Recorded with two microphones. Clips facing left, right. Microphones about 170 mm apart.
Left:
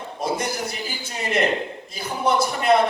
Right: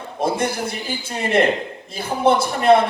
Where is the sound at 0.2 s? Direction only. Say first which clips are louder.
Right 4 dB; 55° right (ahead or behind).